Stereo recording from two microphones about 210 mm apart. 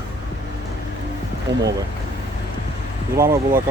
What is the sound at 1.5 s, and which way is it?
Speech, 60° right (ahead or behind).